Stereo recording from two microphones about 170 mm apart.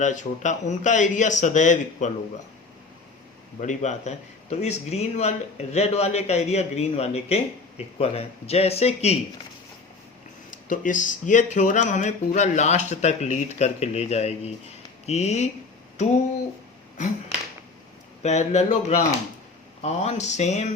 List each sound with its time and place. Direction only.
0.0 s speech: 45° left (ahead or behind)
3.6 s speech: 45° left (ahead or behind)
10.5 s speech: 50° left (ahead or behind)
18.2 s speech: 40° left (ahead or behind)